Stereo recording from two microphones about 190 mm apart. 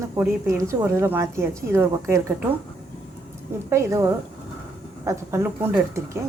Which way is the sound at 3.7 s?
15° right (ahead or behind).